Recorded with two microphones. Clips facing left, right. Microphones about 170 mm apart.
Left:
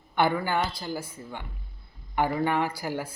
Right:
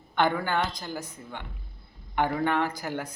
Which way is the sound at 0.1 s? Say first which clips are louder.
Left 1 dB; 10° left (ahead or behind).